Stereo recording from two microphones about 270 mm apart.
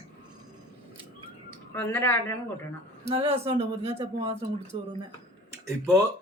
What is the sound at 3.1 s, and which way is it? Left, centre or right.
Speech, centre.